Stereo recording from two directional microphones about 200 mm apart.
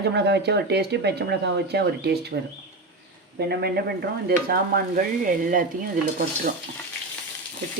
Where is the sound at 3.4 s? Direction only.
55° right (ahead or behind).